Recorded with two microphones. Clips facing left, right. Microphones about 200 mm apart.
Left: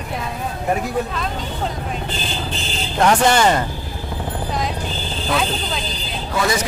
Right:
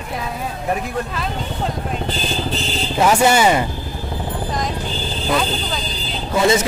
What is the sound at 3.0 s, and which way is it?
Speech, 5° right (ahead or behind).